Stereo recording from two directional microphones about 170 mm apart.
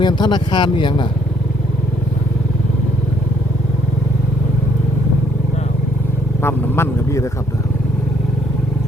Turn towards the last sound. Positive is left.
turn(degrees=15)  # may be behind; listen again after turning